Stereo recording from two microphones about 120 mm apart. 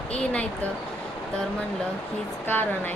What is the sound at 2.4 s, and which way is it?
Speech, 15° left (ahead or behind).